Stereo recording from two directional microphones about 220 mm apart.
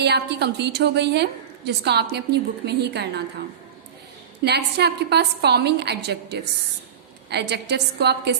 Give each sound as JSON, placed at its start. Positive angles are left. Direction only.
{"t": 0.0, "sound": "a woman's voice", "side_deg": -50}
{"t": 4.4, "sound": "a woman's voice", "side_deg": -50}